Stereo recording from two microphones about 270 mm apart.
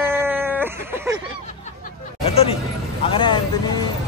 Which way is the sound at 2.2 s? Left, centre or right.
Left.